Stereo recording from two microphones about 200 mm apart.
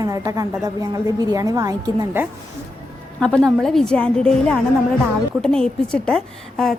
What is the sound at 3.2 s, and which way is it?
A woman's voice, 5° left (ahead or behind).